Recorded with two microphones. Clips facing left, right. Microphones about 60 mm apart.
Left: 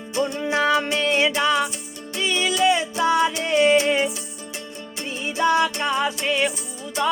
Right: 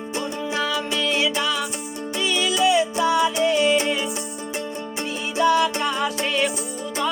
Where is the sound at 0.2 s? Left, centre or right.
Left.